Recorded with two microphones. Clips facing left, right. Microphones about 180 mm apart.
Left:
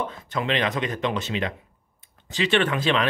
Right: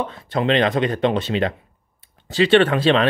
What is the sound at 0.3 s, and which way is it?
Speech, 35° right (ahead or behind).